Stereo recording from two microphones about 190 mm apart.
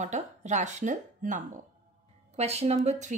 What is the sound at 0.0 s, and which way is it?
A woman's voice, 40° right (ahead or behind).